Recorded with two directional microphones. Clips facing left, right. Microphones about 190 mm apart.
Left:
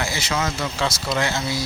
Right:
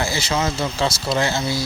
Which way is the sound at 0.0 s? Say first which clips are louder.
Right 3 dB; 30° right (ahead or behind).